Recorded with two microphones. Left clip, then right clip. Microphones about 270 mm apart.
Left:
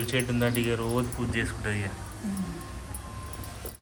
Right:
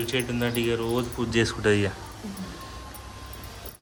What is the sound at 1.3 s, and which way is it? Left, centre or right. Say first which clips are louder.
Speech: right 13 dB; right.